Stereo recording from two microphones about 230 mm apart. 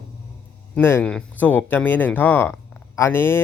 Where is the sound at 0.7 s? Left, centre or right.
Centre.